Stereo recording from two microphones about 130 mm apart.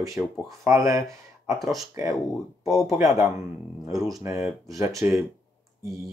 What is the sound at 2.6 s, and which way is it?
Speech, 25° right (ahead or behind).